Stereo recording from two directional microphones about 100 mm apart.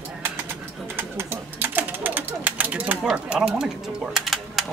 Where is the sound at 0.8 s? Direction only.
25° right (ahead or behind).